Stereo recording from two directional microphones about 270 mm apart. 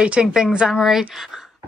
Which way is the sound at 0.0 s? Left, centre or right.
Centre.